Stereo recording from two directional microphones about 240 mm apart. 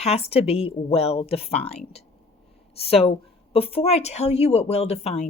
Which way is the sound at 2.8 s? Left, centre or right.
Left.